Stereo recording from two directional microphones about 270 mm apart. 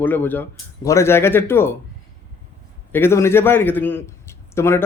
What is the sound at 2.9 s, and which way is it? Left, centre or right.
A man's voice, centre.